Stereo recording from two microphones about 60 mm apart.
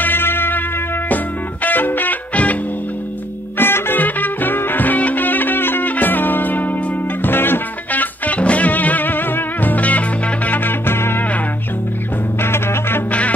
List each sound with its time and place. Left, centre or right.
0.0 s music: left
3.5 s music: left
12.4 s music: left